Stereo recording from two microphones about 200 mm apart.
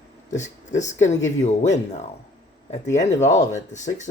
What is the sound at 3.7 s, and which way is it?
Speech, 35° left (ahead or behind).